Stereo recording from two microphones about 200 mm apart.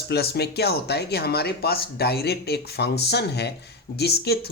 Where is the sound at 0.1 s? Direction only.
55° left (ahead or behind).